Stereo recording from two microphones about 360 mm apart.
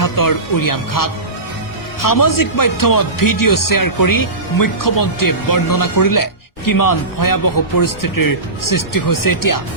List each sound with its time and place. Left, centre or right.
0.0 s speech: left